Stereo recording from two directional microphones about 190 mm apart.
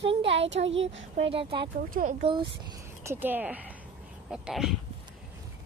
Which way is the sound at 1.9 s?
40° right (ahead or behind).